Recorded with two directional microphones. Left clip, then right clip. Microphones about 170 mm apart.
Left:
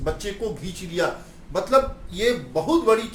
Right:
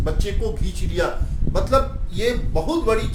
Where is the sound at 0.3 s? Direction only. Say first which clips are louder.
Right 1 dB; 5° right (ahead or behind).